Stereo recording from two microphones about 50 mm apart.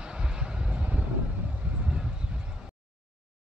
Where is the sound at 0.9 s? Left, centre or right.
Right.